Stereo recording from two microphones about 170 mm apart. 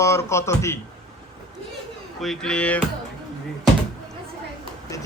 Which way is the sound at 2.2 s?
Centre (ahead or behind).